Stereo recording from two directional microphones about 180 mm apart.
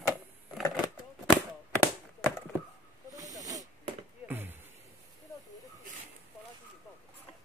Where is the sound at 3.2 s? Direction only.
20° right (ahead or behind).